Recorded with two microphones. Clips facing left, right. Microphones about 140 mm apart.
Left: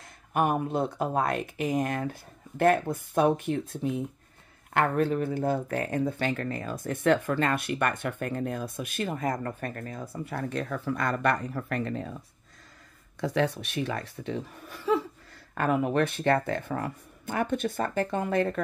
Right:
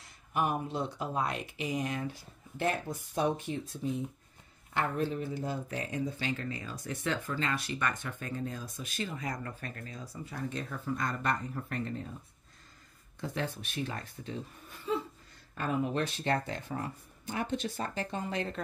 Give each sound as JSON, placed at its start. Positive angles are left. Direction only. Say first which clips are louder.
{"t": 0.3, "sound": "speech", "louder": "left 6 dB", "side_deg": 55}
{"t": 13.2, "sound": "speech", "louder": "left 9 dB", "side_deg": 75}
{"t": 15.5, "sound": "speech", "louder": "left 6 dB", "side_deg": 65}